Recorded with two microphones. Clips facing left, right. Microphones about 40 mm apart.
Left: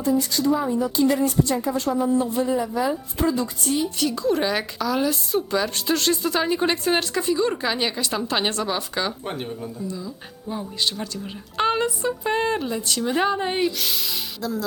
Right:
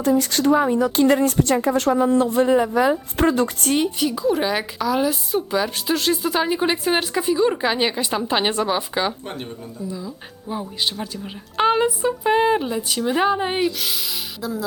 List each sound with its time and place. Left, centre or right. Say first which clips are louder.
0.0 s speech: right 3 dB; right
4.0 s a woman's voice: right 2 dB; centre
9.2 s speech: left 2 dB; centre
9.8 s a woman's voice: right 1 dB; centre
13.7 s a woman's voice: right 1 dB; centre